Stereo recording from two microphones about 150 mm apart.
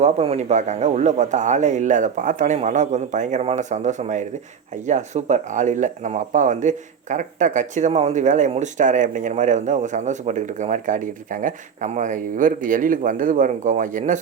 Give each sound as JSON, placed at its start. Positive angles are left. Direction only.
{"t": 0.0, "sound": "speech", "side_deg": -45}